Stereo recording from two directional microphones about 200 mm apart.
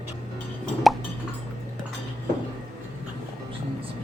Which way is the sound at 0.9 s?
Centre (ahead or behind).